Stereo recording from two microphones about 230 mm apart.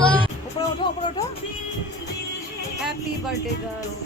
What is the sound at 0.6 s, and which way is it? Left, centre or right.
Music, left.